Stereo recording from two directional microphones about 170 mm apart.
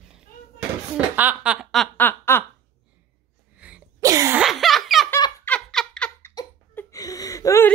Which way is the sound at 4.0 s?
20° right (ahead or behind).